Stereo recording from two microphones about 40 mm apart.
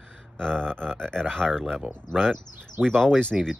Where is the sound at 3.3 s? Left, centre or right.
Centre.